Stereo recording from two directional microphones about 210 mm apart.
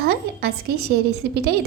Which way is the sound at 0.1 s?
50° right (ahead or behind).